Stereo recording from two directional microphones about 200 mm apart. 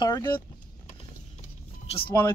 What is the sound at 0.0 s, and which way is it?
Speech, 20° left (ahead or behind).